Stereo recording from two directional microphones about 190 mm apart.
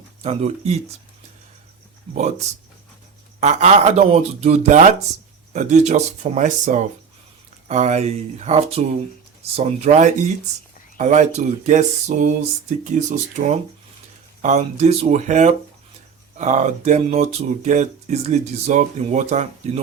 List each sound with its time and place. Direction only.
0.2 s speech: 35° right (ahead or behind)
2.1 s speech: 35° right (ahead or behind)